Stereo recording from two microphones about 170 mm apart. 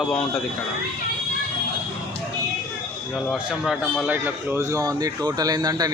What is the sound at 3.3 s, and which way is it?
A man's voice, centre (ahead or behind).